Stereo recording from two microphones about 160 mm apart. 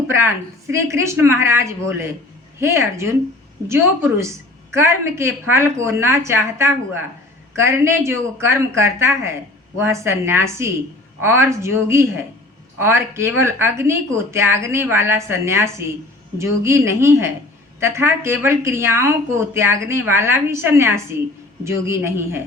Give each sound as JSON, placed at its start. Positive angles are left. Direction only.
{"t": 0.7, "sound": "speech", "side_deg": -15}
{"t": 4.2, "sound": "speech", "side_deg": -15}